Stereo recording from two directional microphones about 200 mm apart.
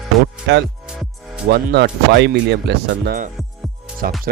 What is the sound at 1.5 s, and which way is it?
Speech, 55° right (ahead or behind).